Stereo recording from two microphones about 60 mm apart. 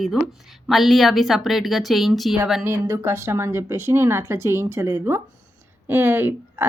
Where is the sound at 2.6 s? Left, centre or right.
Right.